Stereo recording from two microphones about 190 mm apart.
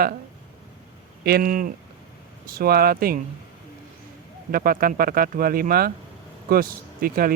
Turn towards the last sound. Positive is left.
turn(degrees=-50)  # may be behind; listen again after turning